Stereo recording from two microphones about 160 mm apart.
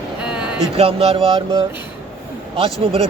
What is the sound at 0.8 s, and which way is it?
Speech, 35° right (ahead or behind).